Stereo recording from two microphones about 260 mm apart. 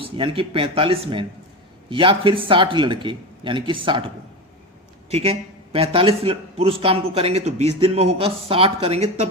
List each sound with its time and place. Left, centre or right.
0.0 s a man's voice: centre